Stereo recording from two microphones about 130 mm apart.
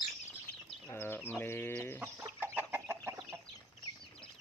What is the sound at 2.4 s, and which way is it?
Chicken, 15° right (ahead or behind).